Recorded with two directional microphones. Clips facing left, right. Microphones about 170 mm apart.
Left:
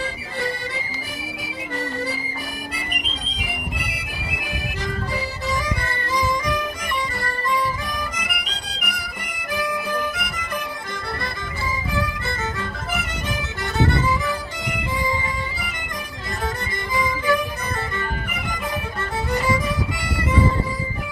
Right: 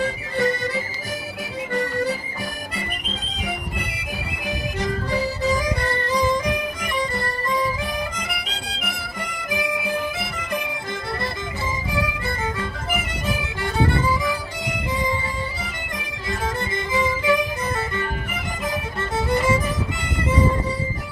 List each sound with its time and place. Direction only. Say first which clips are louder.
0.0 s accordion: right 6 dB; 45° right (ahead or behind)
16.9 s music: right 1 dB; 25° right (ahead or behind)